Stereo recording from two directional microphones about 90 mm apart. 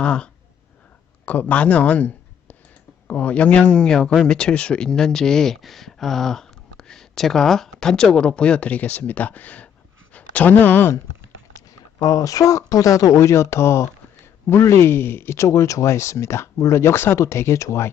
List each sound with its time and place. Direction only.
0.0 s speech: 10° left (ahead or behind)
12.0 s speech: 40° left (ahead or behind)